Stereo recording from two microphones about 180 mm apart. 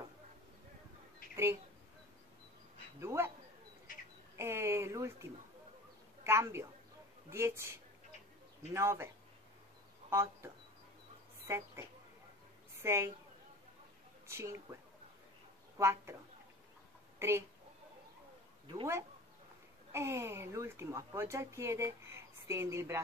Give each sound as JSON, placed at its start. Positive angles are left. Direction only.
{"t": 1.3, "sound": "speech", "side_deg": -15}
{"t": 3.0, "sound": "speech", "side_deg": -15}
{"t": 4.4, "sound": "speech", "side_deg": -15}
{"t": 12.8, "sound": "speech", "side_deg": -15}
{"t": 14.2, "sound": "speech", "side_deg": -15}
{"t": 15.8, "sound": "speech", "side_deg": -15}
{"t": 17.2, "sound": "speech", "side_deg": -15}
{"t": 19.9, "sound": "speech", "side_deg": -15}